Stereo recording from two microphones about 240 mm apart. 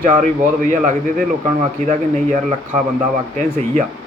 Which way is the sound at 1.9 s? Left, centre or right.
Right.